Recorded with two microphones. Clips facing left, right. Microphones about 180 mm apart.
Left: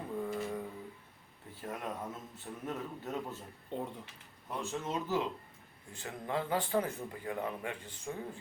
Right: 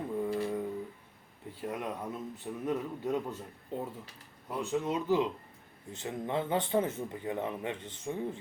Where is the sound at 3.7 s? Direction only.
5° right (ahead or behind).